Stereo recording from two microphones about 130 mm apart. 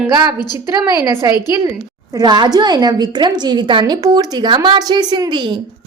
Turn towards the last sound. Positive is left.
turn(degrees=-35)  # may be behind; listen again after turning